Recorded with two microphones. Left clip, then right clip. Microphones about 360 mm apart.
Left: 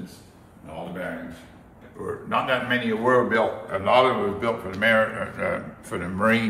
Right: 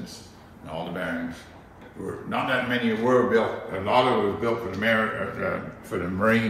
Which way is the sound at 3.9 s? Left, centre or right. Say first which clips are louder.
Left 1 dB; left.